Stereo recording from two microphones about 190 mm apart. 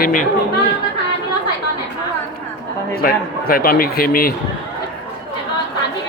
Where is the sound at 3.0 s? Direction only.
50° left (ahead or behind).